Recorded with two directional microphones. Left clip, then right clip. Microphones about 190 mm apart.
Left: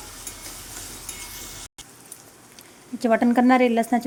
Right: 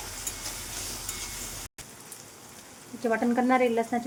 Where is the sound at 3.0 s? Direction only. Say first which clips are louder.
Left 7 dB; 55° left (ahead or behind).